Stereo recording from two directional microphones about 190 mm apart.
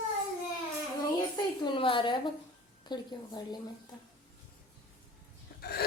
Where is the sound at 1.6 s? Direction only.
25° left (ahead or behind).